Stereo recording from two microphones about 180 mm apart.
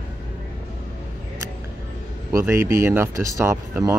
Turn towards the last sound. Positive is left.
turn(degrees=-15)  # may be behind; listen again after turning